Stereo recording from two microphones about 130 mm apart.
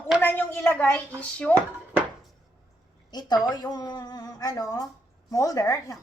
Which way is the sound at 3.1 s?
35° left (ahead or behind).